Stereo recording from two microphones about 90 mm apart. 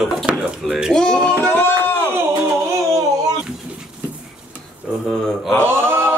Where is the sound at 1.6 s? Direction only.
25° left (ahead or behind).